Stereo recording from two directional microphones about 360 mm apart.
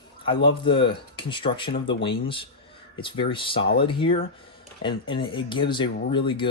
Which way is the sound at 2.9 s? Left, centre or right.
Centre.